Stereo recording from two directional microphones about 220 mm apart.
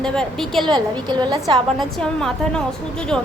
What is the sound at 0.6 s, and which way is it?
Speech, 20° right (ahead or behind).